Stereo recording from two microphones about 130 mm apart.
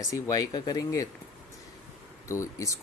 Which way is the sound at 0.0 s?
25° left (ahead or behind).